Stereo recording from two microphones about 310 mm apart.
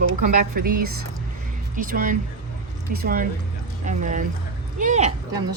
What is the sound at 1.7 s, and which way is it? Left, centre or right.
Speech, right.